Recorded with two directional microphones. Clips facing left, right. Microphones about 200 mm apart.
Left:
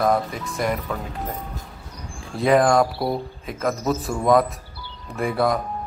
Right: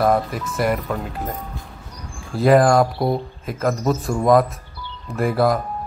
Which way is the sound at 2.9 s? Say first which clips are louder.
Right 3 dB; 20° right (ahead or behind).